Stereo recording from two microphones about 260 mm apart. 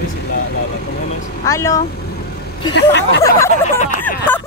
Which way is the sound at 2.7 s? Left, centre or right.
Left.